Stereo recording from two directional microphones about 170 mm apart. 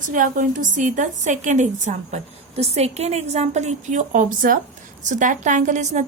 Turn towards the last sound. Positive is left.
turn(degrees=-45)  # may be behind; listen again after turning